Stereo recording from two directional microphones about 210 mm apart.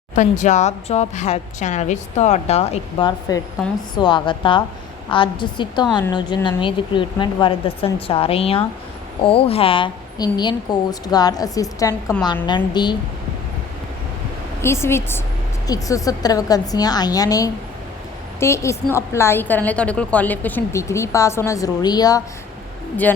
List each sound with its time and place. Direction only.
0.2 s a woman's voice: 35° left (ahead or behind)
14.6 s a woman's voice: 10° left (ahead or behind)